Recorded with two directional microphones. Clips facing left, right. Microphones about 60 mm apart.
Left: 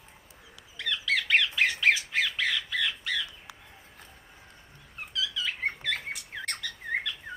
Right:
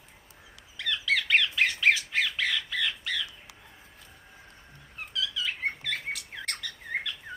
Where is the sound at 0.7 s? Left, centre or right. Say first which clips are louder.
Right 1 dB; centre.